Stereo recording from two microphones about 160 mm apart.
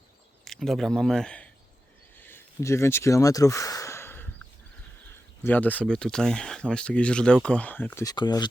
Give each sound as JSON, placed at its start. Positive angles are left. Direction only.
{"t": 0.4, "sound": "a man's voice", "side_deg": 0}
{"t": 2.1, "sound": "a sound", "side_deg": 15}
{"t": 5.4, "sound": "speech", "side_deg": 10}
{"t": 8.1, "sound": "speech", "side_deg": 25}